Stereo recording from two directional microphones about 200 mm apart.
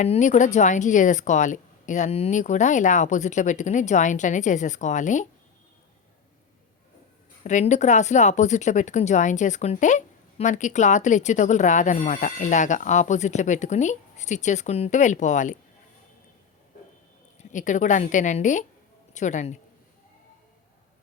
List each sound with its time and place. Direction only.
0.0 s speech: 35° left (ahead or behind)
7.4 s speech: 35° left (ahead or behind)
17.5 s speech: 40° left (ahead or behind)